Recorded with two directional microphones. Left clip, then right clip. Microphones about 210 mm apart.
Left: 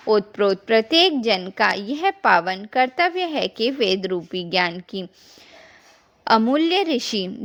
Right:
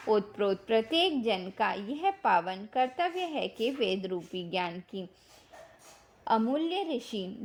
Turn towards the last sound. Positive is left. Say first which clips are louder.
# left 12 dB
turn(degrees=35)  # may be behind; listen again after turning